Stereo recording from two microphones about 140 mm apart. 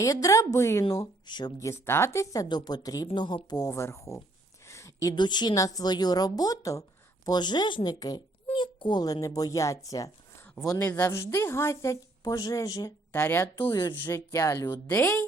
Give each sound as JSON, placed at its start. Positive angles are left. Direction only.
{"t": 0.0, "sound": "a woman's voice", "side_deg": 25}
{"t": 10.8, "sound": "speech", "side_deg": 15}
{"t": 13.1, "sound": "a woman's voice", "side_deg": 10}